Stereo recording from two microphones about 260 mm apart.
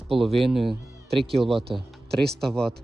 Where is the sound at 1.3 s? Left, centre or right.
Centre.